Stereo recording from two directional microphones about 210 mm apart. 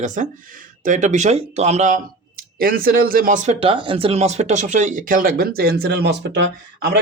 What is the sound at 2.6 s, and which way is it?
A man's voice, 45° right (ahead or behind).